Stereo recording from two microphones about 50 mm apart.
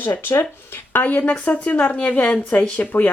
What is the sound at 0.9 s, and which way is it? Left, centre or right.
A woman's voice, left.